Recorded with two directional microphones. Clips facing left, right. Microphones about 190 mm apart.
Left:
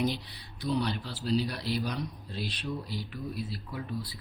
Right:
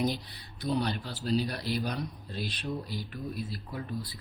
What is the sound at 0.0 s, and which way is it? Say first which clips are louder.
Speech: even; 45° right (ahead or behind).